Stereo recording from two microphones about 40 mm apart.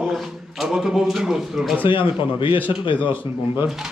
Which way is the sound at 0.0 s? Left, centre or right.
Centre.